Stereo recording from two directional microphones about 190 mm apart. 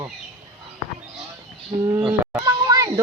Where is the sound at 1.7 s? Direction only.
35° right (ahead or behind).